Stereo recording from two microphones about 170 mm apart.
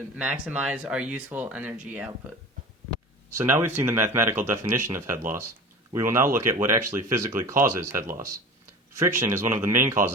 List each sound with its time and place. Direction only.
0.2 s speech: 5° right (ahead or behind)
3.2 s speech: 15° right (ahead or behind)